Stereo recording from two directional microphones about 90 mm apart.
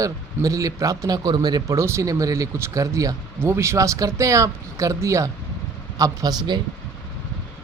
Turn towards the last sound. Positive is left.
turn(degrees=-50)  # may be behind; listen again after turning